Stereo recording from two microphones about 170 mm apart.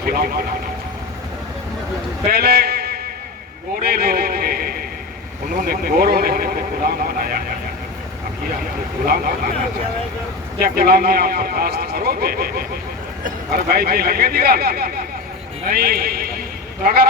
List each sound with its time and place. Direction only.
0.0 s speech: 60° right (ahead or behind)
2.3 s a sound: 65° right (ahead or behind)
3.8 s speech: 65° right (ahead or behind)
9.0 s speech: 60° right (ahead or behind)
10.6 s a man's voice: 60° right (ahead or behind)